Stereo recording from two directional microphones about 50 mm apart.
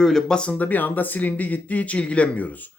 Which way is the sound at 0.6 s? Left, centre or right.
Left.